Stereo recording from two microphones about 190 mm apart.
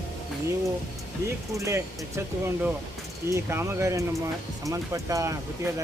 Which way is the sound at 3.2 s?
15° right (ahead or behind).